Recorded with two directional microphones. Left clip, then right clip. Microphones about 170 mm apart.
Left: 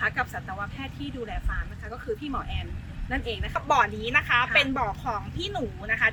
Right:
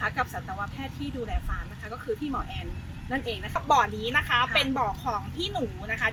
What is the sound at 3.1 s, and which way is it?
Speech, 5° left (ahead or behind).